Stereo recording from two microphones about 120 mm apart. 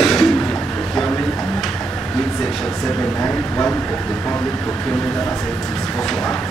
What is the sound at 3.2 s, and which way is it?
Speech, 15° left (ahead or behind).